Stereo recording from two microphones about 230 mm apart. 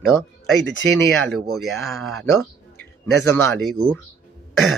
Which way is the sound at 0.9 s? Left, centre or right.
Centre.